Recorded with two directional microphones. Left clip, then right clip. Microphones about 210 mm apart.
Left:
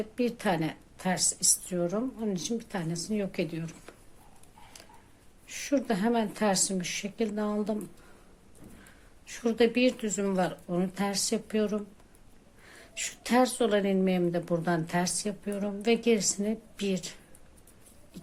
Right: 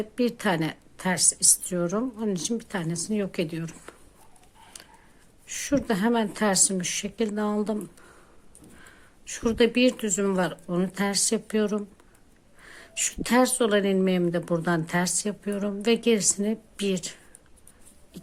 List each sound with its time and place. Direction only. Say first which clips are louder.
0.2 s speech: right 4 dB; 25° right (ahead or behind)
5.5 s speech: right 3 dB; 25° right (ahead or behind)
9.2 s speech: right 3 dB; 25° right (ahead or behind)